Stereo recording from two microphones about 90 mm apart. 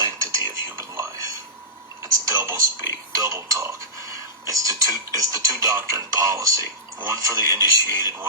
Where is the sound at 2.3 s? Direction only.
35° right (ahead or behind).